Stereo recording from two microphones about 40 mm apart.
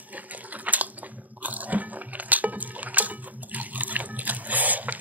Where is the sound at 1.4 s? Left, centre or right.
Right.